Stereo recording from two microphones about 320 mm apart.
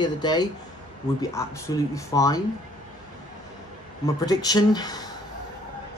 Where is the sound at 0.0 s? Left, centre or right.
Centre.